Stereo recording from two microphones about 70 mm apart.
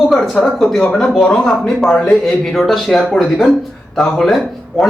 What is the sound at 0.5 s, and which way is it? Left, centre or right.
Speech, centre.